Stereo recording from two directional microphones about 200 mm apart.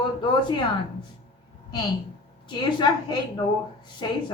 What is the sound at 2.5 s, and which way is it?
A woman's voice, 20° left (ahead or behind).